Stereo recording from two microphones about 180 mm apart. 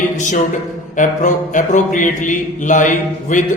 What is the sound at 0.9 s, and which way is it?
Speech, 45° left (ahead or behind).